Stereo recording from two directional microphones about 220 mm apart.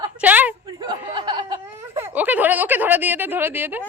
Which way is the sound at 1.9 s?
10° right (ahead or behind).